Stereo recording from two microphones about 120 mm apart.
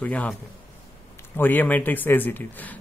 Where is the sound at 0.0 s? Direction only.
10° left (ahead or behind).